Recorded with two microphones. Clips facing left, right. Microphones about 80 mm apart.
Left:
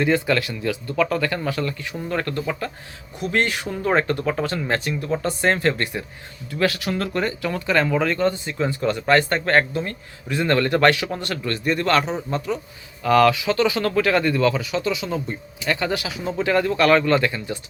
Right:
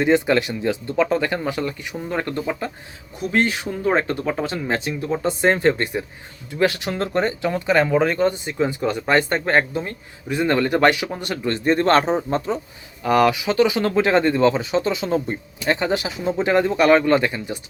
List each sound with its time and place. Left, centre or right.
0.0 s speech: right
3.7 s speech: centre; by 12.5 s right
13.0 s speech: centre